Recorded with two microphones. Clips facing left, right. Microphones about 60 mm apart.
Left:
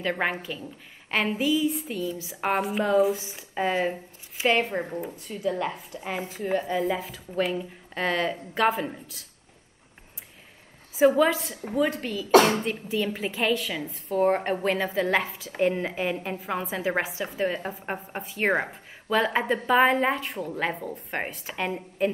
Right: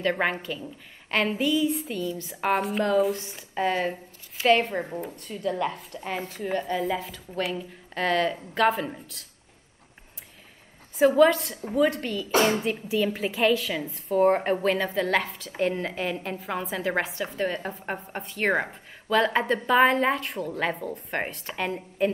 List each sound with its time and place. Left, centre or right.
0.0 s a woman's voice: centre
11.0 s a woman's voice: centre
12.3 s speech: left
12.6 s a woman's voice: centre